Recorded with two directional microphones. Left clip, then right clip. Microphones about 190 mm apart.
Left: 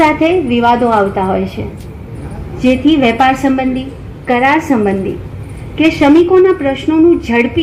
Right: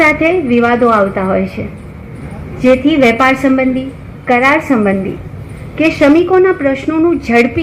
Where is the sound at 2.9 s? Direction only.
25° right (ahead or behind).